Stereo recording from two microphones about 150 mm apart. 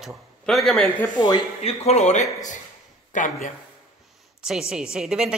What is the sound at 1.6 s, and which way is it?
A man's voice, 40° left (ahead or behind).